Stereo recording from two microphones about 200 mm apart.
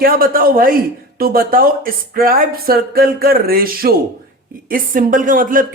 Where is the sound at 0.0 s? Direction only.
45° right (ahead or behind).